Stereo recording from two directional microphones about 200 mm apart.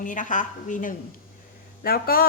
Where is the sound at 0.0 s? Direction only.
40° left (ahead or behind).